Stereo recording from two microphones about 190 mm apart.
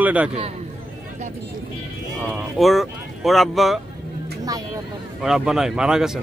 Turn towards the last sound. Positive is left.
turn(degrees=-5)  # may be behind; listen again after turning